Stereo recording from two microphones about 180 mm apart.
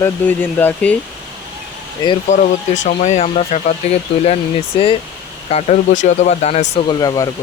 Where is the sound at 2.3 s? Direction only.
45° left (ahead or behind).